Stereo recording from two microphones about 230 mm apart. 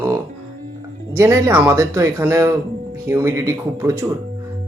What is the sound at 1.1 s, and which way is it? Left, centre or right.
Speech, centre.